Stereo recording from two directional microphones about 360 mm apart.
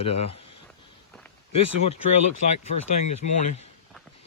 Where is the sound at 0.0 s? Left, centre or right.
Centre.